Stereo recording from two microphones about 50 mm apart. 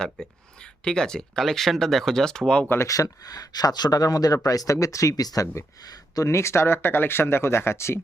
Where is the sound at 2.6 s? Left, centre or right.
Left.